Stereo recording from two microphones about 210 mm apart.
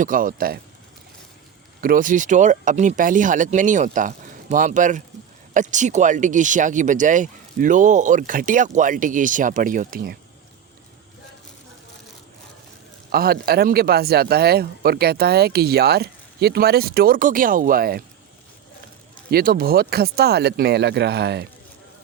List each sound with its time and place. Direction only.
0.0 s speech: 40° right (ahead or behind)
1.8 s speech: 40° right (ahead or behind)
13.1 s speech: 45° right (ahead or behind)
19.3 s speech: 45° right (ahead or behind)